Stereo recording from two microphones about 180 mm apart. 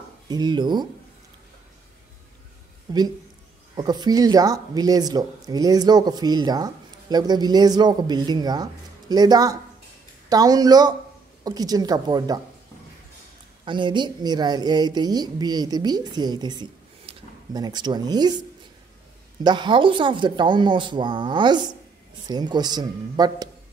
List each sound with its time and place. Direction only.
0.3 s speech: 25° right (ahead or behind)
2.9 s speech: 25° right (ahead or behind)
13.7 s speech: 25° right (ahead or behind)
19.4 s speech: 25° right (ahead or behind)